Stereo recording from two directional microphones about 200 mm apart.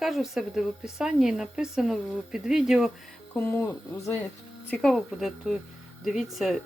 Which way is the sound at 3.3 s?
10° left (ahead or behind).